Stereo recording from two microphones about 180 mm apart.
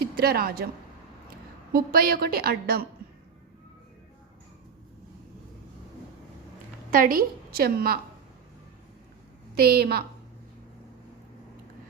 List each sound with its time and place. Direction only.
0.0 s a woman's voice: 60° right (ahead or behind)
1.7 s a woman's voice: 55° right (ahead or behind)
6.9 s a woman's voice: 50° right (ahead or behind)
9.6 s a woman's voice: 60° right (ahead or behind)